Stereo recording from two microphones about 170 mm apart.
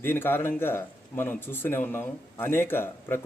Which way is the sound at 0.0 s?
10° left (ahead or behind).